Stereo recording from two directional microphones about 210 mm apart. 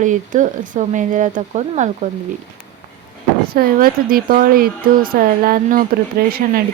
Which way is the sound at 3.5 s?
45° right (ahead or behind).